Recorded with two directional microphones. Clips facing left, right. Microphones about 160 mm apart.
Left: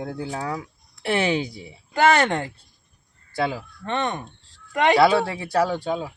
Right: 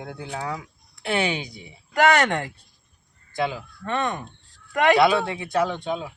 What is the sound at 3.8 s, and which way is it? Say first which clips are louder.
Speech: even; 25° left (ahead or behind).